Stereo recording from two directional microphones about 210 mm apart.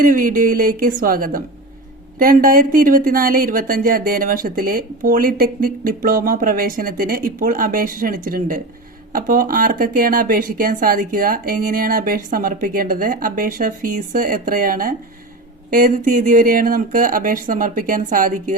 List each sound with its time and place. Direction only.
0.0 s speech: 40° right (ahead or behind)